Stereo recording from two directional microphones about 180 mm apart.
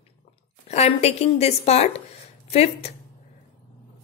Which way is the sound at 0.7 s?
35° left (ahead or behind).